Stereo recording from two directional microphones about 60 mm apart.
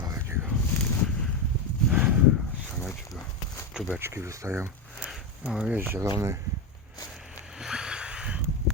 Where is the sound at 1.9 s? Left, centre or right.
Right.